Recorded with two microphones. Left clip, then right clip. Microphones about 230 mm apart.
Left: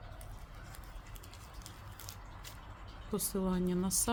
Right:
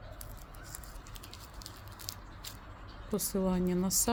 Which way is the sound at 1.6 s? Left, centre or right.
Right.